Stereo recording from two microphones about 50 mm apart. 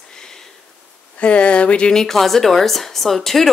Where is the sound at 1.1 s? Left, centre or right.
Left.